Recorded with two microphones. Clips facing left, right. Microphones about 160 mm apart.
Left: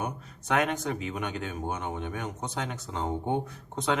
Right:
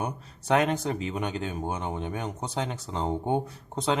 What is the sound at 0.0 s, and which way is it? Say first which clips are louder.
A man's voice: right 1 dB; 30° right (ahead or behind).